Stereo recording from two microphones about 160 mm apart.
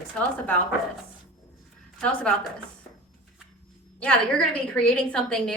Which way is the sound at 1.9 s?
5° left (ahead or behind).